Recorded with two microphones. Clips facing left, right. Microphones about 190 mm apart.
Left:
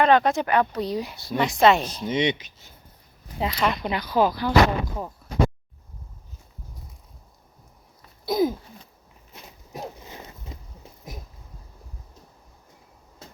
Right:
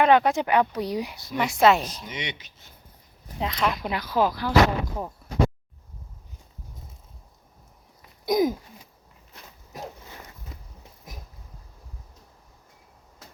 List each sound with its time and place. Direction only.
0.0 s speech: 10° right (ahead or behind)
1.1 s speech: 30° left (ahead or behind)
1.4 s speech: 10° right (ahead or behind)
2.0 s speech: 25° left (ahead or behind)
3.4 s speech: centre (ahead or behind)
8.2 s a sound: 15° right (ahead or behind)
9.3 s walk: 20° left (ahead or behind)